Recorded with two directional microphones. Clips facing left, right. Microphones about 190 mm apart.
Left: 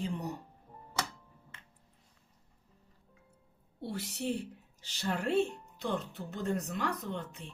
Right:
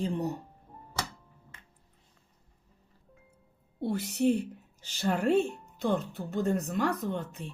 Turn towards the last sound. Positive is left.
turn(degrees=-45)  # may be behind; listen again after turning